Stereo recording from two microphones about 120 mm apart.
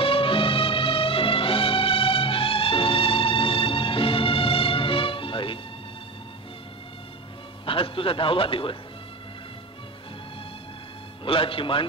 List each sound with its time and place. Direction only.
0.0 s music: 50° left (ahead or behind)
7.6 s a man's voice: 50° left (ahead or behind)
11.2 s a man's voice: 50° left (ahead or behind)